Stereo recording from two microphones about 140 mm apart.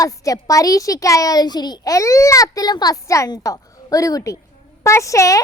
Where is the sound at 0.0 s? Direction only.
25° left (ahead or behind).